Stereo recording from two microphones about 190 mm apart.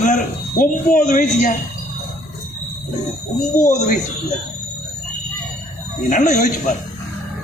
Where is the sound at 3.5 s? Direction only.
40° left (ahead or behind).